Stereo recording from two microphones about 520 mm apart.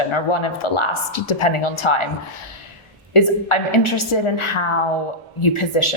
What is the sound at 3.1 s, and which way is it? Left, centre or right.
Speech, left.